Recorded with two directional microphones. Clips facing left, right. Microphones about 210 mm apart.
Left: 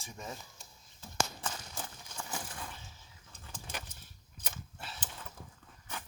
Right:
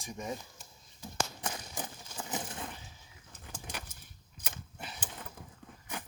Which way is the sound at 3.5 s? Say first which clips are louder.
Right 1 dB; 10° right (ahead or behind).